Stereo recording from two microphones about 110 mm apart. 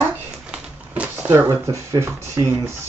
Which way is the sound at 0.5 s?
10° right (ahead or behind).